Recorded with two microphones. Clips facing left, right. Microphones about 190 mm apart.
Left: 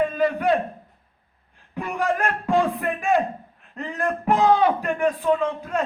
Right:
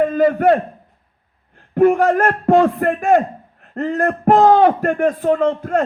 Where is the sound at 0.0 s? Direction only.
50° right (ahead or behind).